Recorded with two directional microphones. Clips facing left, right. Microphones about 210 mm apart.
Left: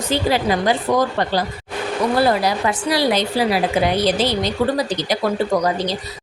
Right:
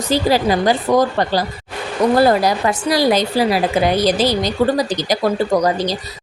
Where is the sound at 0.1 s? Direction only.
35° right (ahead or behind).